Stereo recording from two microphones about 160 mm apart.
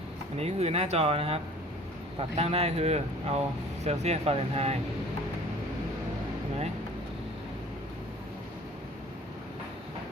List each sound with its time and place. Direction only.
0.3 s speech: 40° right (ahead or behind)